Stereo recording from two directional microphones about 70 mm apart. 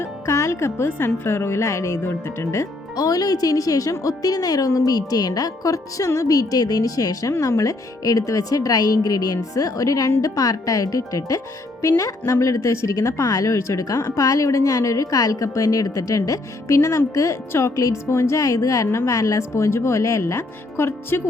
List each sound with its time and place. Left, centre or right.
0.0 s speech: left
2.9 s a woman's voice: left
7.3 s a woman's voice: left